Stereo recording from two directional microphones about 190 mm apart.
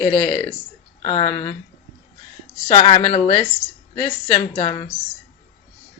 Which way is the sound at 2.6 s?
25° left (ahead or behind).